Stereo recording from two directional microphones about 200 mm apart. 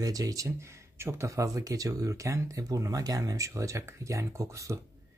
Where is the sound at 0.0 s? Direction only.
15° right (ahead or behind).